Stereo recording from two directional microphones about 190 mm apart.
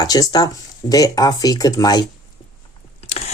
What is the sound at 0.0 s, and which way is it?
Speech, 20° left (ahead or behind).